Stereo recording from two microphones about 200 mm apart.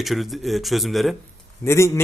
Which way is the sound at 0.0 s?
Centre (ahead or behind).